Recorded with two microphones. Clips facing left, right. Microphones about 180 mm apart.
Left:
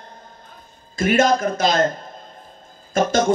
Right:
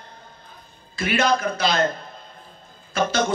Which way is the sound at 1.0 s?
45° left (ahead or behind).